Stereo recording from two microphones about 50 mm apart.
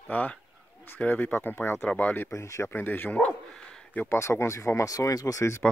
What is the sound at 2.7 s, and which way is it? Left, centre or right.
Speech, left.